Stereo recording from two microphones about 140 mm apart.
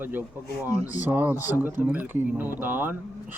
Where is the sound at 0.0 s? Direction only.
15° right (ahead or behind).